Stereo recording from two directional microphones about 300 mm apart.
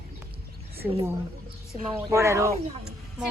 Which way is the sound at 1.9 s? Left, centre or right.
Centre.